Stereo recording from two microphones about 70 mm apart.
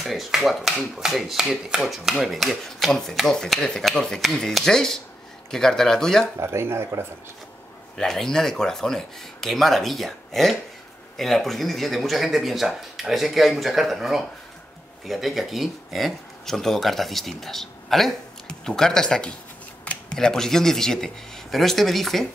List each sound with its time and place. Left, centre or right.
0.0 s finger snapping: centre
0.9 s speech: centre
6.4 s speech: right
8.0 s speech: centre
19.8 s a sound: centre
20.2 s speech: centre